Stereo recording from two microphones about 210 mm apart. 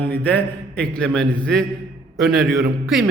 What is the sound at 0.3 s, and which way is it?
A man's voice, 5° left (ahead or behind).